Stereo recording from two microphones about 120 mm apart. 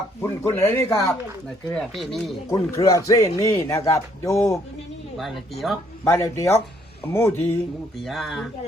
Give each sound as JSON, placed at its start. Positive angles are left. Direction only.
{"t": 0.2, "sound": "speech", "side_deg": 20}
{"t": 1.7, "sound": "speech", "side_deg": 0}
{"t": 2.5, "sound": "speech", "side_deg": 30}
{"t": 5.1, "sound": "speech", "side_deg": 0}
{"t": 6.1, "sound": "speech", "side_deg": 25}
{"t": 7.9, "sound": "speech", "side_deg": 0}